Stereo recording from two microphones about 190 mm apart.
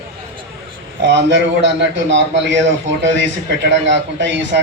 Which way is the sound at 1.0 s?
70° right (ahead or behind).